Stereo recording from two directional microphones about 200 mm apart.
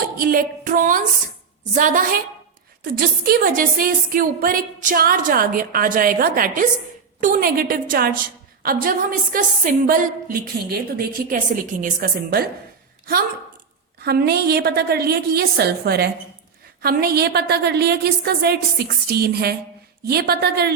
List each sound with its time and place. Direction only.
0.2 s a woman's voice: 45° right (ahead or behind)
3.2 s a woman's voice: 45° right (ahead or behind)
14.0 s a woman's voice: 50° right (ahead or behind)